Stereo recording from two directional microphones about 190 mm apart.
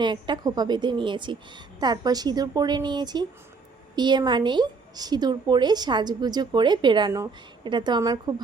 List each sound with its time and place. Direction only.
0.0 s a woman's voice: 25° right (ahead or behind)